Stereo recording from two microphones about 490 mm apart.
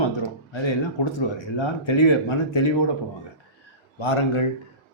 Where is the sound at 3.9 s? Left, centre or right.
Left.